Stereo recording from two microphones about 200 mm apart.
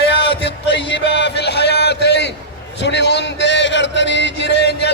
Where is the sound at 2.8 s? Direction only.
60° left (ahead or behind).